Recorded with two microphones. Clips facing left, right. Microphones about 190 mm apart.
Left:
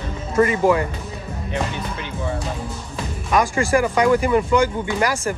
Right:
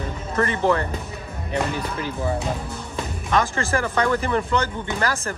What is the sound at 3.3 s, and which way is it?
Speech, 10° left (ahead or behind).